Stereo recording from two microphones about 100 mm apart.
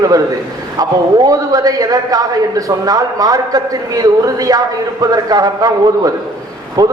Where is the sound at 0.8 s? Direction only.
40° right (ahead or behind).